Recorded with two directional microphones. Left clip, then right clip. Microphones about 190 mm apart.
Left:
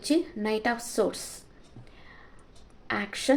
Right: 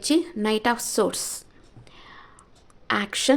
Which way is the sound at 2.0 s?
35° right (ahead or behind).